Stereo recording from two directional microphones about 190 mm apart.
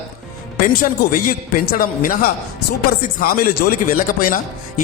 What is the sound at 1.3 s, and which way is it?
Speech, 50° left (ahead or behind).